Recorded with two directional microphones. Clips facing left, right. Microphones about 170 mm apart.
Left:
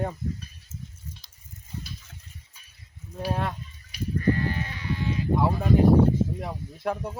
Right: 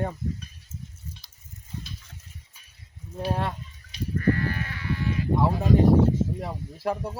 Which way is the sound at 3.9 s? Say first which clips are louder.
Even; 25° right (ahead or behind).